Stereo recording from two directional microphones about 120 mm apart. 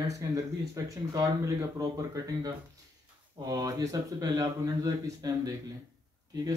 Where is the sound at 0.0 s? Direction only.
30° right (ahead or behind).